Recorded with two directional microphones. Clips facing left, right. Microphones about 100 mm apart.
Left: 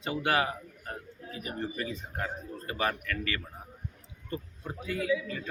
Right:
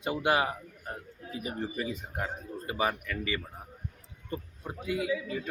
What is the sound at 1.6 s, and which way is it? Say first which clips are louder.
Speech: left 1 dB; 10° right (ahead or behind).